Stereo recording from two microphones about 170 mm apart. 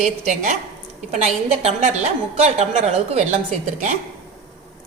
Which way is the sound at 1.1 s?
40° right (ahead or behind).